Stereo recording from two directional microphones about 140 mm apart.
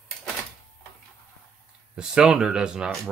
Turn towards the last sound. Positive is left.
turn(degrees=-5)  # may be behind; listen again after turning